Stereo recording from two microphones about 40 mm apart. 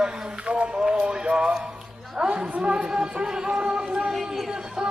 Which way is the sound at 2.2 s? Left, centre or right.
Right.